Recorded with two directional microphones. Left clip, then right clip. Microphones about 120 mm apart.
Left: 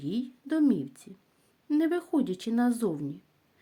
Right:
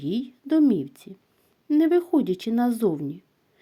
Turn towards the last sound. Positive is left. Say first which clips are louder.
# right 6 dB
turn(degrees=-45)  # may be behind; listen again after turning